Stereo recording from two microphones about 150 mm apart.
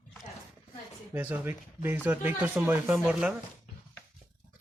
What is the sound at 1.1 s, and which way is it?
Speech, 15° right (ahead or behind).